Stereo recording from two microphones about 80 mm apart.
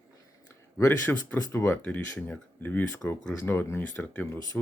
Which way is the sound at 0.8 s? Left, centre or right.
Left.